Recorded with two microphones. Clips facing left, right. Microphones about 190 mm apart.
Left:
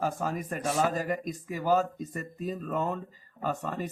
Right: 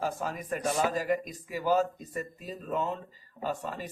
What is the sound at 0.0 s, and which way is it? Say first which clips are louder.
Speech: left 2 dB; 45° left (ahead or behind).